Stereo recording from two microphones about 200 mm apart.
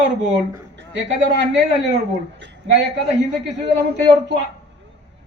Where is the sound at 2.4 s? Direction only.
60° right (ahead or behind).